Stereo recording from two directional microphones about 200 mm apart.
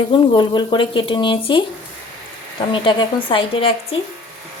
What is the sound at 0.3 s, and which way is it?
Speech, 25° left (ahead or behind).